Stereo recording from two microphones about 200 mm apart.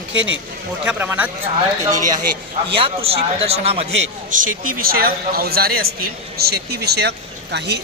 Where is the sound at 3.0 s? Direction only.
30° right (ahead or behind).